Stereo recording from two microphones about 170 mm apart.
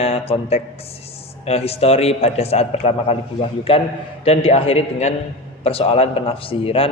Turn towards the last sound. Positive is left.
turn(degrees=35)  # may be behind; listen again after turning